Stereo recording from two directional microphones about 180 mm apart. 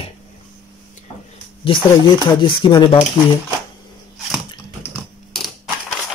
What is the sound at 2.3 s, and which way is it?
Speech, 25° left (ahead or behind).